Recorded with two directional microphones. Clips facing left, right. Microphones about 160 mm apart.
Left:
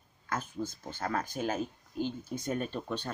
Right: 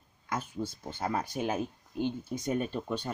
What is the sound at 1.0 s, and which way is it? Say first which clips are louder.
Speech: right 1 dB; 15° right (ahead or behind).